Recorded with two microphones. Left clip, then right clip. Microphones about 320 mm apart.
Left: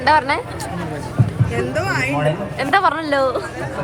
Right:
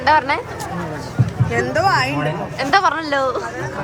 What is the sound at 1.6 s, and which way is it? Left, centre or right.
Speech, right.